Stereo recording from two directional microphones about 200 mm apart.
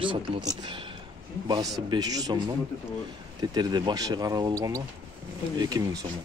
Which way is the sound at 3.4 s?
20° right (ahead or behind).